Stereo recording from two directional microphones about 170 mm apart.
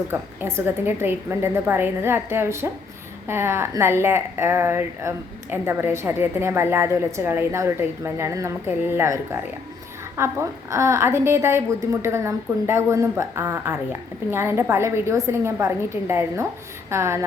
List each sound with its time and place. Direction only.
0.1 s a woman's voice: 15° right (ahead or behind)